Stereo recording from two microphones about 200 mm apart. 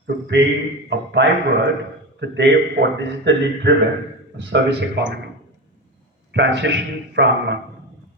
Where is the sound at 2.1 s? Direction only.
60° right (ahead or behind).